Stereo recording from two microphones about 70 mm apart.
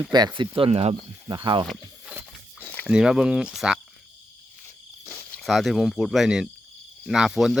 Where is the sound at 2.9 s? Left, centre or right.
Centre.